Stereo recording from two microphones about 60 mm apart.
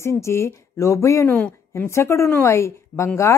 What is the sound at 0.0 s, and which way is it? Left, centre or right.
A woman's voice, left.